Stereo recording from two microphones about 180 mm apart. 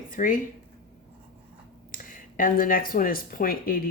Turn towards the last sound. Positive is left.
turn(degrees=55)  # may be behind; listen again after turning